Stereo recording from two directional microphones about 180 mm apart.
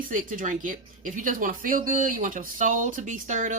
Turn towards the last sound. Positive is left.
turn(degrees=-45)  # may be behind; listen again after turning